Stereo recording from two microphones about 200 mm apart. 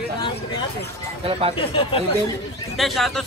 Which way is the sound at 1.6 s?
25° left (ahead or behind).